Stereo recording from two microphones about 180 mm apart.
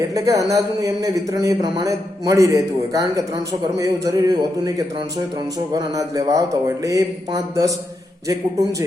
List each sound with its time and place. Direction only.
0.1 s a man's voice: 20° right (ahead or behind)